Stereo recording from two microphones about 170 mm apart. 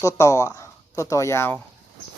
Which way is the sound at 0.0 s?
15° left (ahead or behind).